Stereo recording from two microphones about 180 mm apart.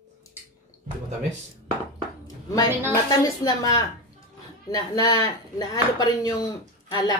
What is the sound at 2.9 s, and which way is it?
Speech, 20° left (ahead or behind).